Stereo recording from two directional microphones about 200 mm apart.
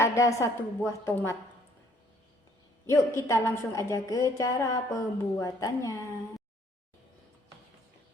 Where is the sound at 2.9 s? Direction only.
15° left (ahead or behind).